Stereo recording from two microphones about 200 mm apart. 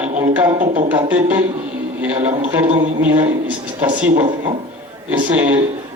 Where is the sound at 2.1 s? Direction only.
35° right (ahead or behind).